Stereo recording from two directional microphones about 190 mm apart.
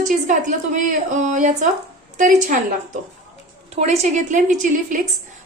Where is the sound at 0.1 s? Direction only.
40° right (ahead or behind).